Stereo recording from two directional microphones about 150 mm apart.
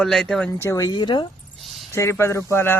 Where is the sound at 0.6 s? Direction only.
20° left (ahead or behind).